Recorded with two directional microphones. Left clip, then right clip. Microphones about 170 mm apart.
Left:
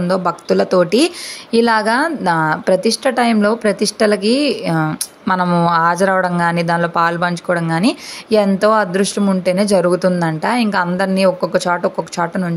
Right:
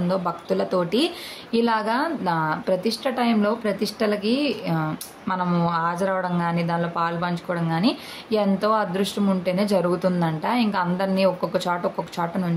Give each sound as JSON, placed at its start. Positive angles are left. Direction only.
{"t": 0.1, "sound": "speech", "side_deg": 40}